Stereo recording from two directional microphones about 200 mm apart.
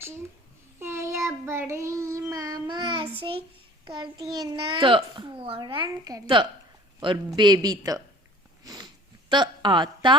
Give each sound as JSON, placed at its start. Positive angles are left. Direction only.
{"t": 0.8, "sound": "child singing", "side_deg": -15}
{"t": 3.8, "sound": "a child's voice", "side_deg": -20}
{"t": 8.6, "sound": "a sound", "side_deg": -20}
{"t": 9.3, "sound": "a woman's voice", "side_deg": -20}